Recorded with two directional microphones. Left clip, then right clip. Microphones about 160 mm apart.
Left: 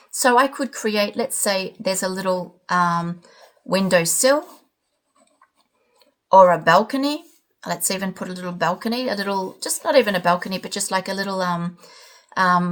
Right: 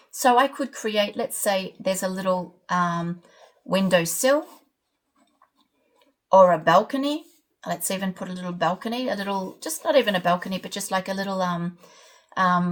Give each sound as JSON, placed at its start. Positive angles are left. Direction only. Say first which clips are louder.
{"t": 0.1, "sound": "a woman's voice", "louder": "left 2 dB", "side_deg": 35}
{"t": 6.2, "sound": "a woman's voice", "louder": "left 3 dB", "side_deg": 40}